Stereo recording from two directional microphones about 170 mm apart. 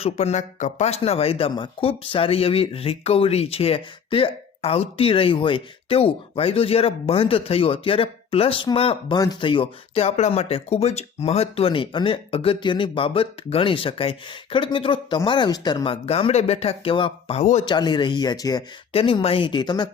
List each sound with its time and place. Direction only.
0.0 s speech: 40° left (ahead or behind)
9.1 s speech: 25° left (ahead or behind); by 17.6 s 40° left (ahead or behind)
17.7 s speech: 25° left (ahead or behind)
18.9 s speech: 35° left (ahead or behind)